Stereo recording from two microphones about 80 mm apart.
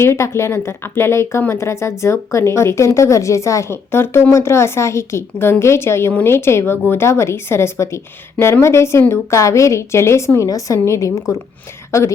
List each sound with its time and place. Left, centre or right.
0.0 s a woman's voice: left